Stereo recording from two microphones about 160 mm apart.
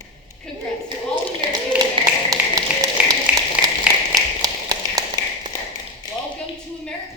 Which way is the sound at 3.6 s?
10° right (ahead or behind).